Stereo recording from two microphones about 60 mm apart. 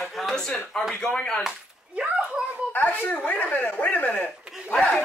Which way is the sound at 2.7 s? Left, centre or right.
Left.